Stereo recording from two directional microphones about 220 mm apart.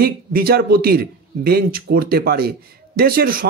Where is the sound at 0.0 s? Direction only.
45° right (ahead or behind).